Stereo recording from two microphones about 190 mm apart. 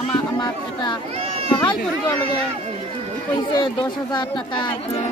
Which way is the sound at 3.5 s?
25° left (ahead or behind).